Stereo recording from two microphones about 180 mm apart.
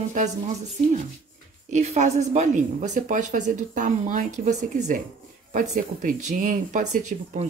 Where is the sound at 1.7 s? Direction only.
40° right (ahead or behind).